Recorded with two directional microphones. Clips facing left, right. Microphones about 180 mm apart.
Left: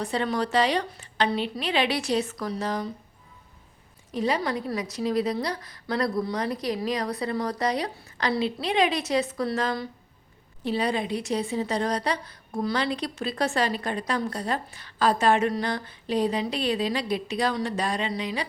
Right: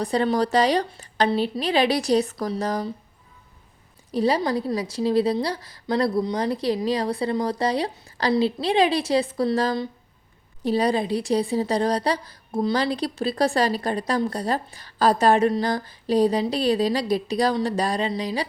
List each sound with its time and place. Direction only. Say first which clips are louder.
0.0 s speech: right 5 dB; 35° right (ahead or behind)
4.1 s a woman's voice: right 5 dB; 35° right (ahead or behind)
10.6 s speech: right 5 dB; 40° right (ahead or behind)
12.5 s speech: right 5 dB; 25° right (ahead or behind)
12.7 s speech: right 4 dB; 35° right (ahead or behind)